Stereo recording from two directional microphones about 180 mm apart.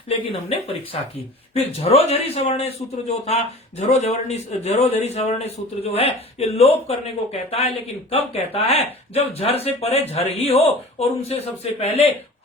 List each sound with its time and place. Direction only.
0.3 s a man's voice: 30° left (ahead or behind)
8.1 s a man's voice: 35° left (ahead or behind)